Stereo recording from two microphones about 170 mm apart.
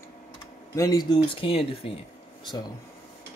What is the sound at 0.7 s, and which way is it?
Speech, 20° left (ahead or behind).